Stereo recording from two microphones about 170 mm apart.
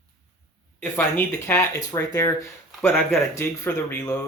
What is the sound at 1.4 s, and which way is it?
Speech, 15° left (ahead or behind).